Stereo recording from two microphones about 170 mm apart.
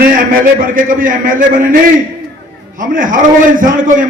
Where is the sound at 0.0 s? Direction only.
55° right (ahead or behind).